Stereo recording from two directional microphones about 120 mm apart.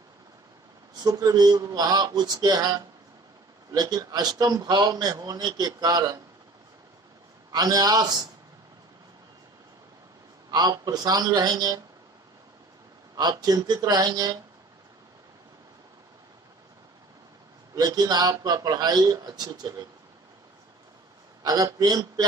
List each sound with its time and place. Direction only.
0.9 s a man's voice: 30° right (ahead or behind)
7.5 s a man's voice: 30° right (ahead or behind)
10.5 s a man's voice: 30° right (ahead or behind)
13.1 s a man's voice: 35° right (ahead or behind)
17.7 s a man's voice: 30° right (ahead or behind)
21.5 s a man's voice: 30° right (ahead or behind)